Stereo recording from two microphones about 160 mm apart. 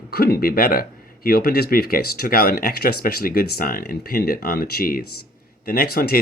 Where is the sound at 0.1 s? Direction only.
75° left (ahead or behind).